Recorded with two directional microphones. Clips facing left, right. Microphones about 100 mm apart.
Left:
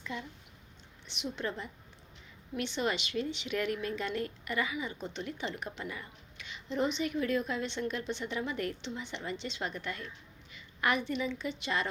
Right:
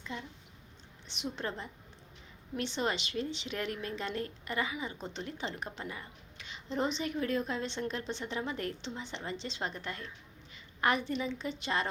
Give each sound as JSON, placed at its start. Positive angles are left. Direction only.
{"t": 0.0, "sound": "speech", "side_deg": -25}
{"t": 1.0, "sound": "a woman's voice", "side_deg": -35}